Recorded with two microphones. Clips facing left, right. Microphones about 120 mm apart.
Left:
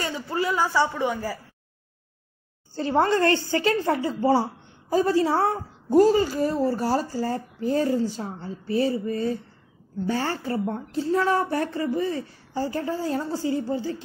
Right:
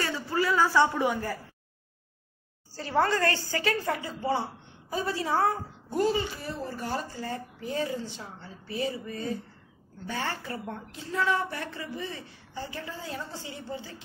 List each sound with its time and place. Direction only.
0.0 s a sound: 25° left (ahead or behind)
0.7 s speech: centre (ahead or behind)
2.7 s a woman's voice: 25° left (ahead or behind)